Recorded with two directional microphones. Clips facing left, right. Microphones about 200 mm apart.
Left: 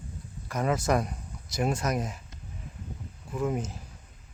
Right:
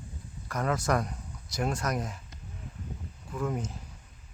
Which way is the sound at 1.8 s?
20° left (ahead or behind).